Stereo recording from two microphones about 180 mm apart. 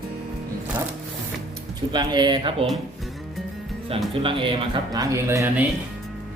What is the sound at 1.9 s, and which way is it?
Speech, 25° right (ahead or behind).